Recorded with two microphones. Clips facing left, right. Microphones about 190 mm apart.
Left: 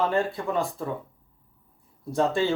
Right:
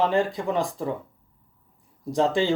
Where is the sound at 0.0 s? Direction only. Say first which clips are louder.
Right 2 dB; 15° right (ahead or behind).